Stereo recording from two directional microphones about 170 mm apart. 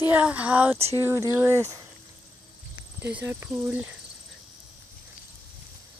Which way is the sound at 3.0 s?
10° right (ahead or behind).